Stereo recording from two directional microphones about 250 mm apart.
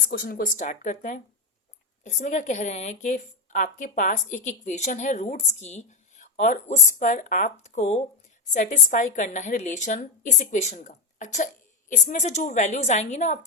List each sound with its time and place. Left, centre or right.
0.1 s a woman's voice: left